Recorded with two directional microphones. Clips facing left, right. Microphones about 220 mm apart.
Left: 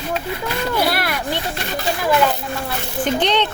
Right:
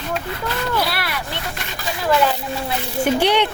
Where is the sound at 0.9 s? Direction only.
45° left (ahead or behind).